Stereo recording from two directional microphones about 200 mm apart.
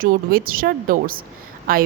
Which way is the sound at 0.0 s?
45° right (ahead or behind).